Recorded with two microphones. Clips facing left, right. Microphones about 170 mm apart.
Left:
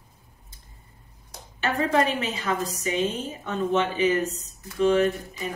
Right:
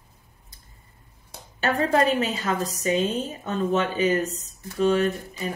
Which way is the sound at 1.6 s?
40° right (ahead or behind).